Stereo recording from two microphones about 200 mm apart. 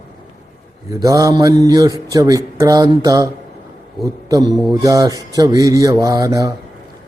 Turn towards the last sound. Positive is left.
turn(degrees=-15)  # may be behind; listen again after turning